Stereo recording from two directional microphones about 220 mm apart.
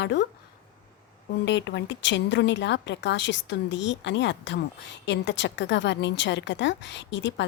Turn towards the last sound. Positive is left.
turn(degrees=55)  # may be behind; listen again after turning